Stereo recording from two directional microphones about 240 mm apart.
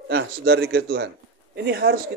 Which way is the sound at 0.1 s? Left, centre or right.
Right.